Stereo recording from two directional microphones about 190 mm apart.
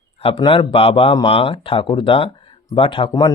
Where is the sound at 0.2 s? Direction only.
30° left (ahead or behind).